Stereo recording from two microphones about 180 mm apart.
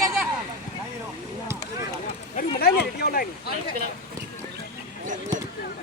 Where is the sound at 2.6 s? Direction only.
60° left (ahead or behind).